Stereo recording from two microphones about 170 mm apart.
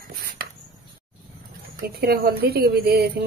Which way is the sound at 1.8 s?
70° right (ahead or behind).